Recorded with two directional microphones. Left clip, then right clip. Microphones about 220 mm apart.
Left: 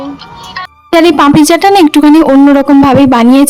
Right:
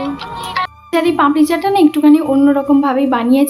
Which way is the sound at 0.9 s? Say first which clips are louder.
Left 8 dB; 50° left (ahead or behind).